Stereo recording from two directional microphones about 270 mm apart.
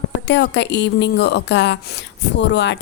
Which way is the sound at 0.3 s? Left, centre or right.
Left.